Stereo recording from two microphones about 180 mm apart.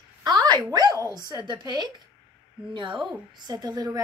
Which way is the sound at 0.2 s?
20° right (ahead or behind).